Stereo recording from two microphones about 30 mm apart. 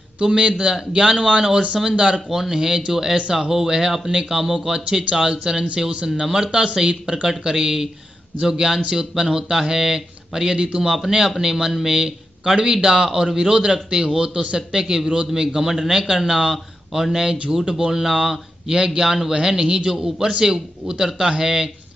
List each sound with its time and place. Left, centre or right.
0.2 s a man's voice: right
6.2 s a man's voice: centre
6.9 s a man's voice: right
7.2 s a man's voice: right
10.5 s a man's voice: right
17.9 s a man's voice: centre